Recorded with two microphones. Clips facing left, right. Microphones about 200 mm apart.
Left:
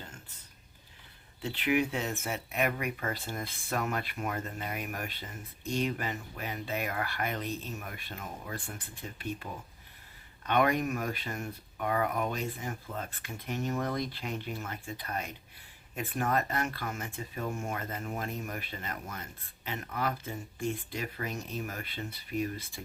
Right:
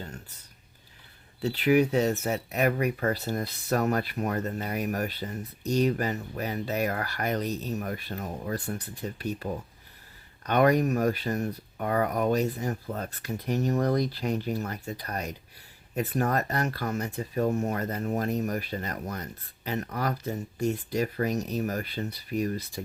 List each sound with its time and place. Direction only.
1.4 s speech: 40° right (ahead or behind)